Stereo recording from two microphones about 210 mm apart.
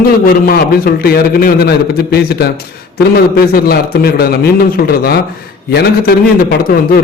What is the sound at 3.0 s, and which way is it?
A man's voice, 45° left (ahead or behind).